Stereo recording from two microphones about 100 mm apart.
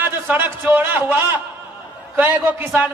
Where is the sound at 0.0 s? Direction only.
20° right (ahead or behind).